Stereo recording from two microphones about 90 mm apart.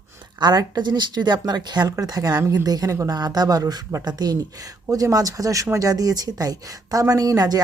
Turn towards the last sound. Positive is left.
turn(degrees=-45)  # may be behind; listen again after turning